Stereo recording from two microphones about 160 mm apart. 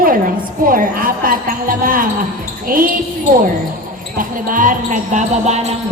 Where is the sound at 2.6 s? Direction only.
60° right (ahead or behind).